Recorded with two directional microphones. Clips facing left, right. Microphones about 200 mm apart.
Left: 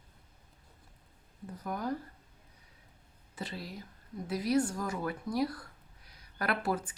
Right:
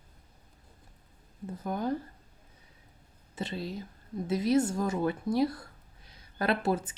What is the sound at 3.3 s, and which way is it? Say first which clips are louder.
Speech: right 6 dB; 25° right (ahead or behind).